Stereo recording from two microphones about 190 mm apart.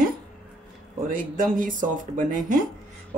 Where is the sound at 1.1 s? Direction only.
45° right (ahead or behind).